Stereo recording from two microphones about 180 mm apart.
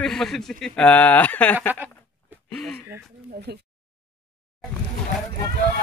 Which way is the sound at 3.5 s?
60° right (ahead or behind).